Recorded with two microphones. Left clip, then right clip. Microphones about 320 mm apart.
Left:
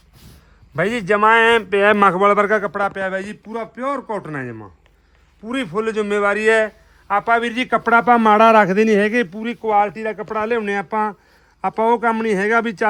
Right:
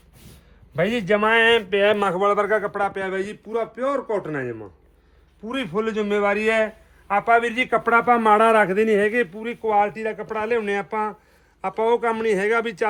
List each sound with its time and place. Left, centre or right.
0.8 s a man's voice: left